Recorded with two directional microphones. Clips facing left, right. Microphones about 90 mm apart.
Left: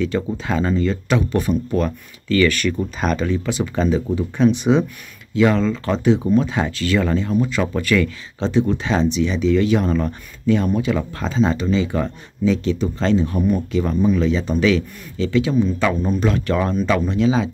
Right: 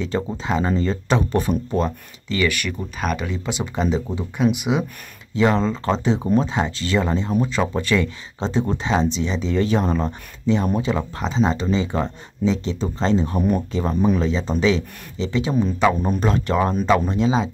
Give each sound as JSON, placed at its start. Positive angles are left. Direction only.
{"t": 0.0, "sound": "speech", "side_deg": -25}
{"t": 0.7, "sound": "speech", "side_deg": -30}
{"t": 3.2, "sound": "speech", "side_deg": -15}
{"t": 4.4, "sound": "speech", "side_deg": -10}
{"t": 5.3, "sound": "speech", "side_deg": -30}